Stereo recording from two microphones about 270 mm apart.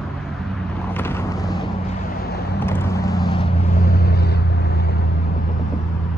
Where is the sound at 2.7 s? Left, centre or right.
Centre.